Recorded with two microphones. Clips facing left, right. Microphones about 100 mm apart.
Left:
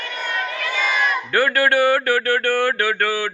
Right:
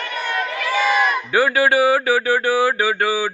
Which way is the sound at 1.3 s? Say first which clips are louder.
Right 1 dB; 10° right (ahead or behind).